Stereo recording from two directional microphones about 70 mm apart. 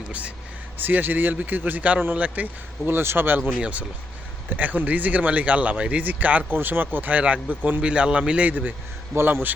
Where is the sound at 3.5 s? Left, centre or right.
Centre.